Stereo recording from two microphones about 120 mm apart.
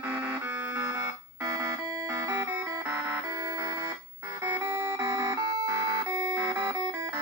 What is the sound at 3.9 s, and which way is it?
Music, 20° right (ahead or behind).